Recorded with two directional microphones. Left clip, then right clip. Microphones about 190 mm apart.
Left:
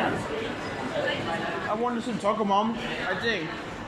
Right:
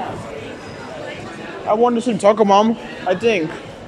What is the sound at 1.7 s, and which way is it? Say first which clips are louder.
Speech: right 17 dB; 55° right (ahead or behind).